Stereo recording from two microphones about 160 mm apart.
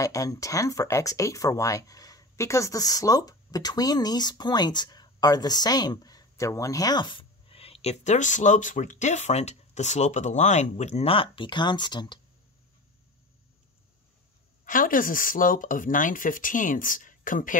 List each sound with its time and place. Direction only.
0.0 s speech: 20° left (ahead or behind)
14.6 s speech: 60° left (ahead or behind)